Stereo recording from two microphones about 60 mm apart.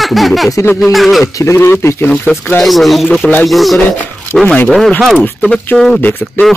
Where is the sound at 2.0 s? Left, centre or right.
Left.